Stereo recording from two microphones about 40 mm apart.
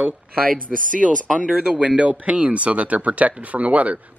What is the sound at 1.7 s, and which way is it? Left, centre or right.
Speech, right.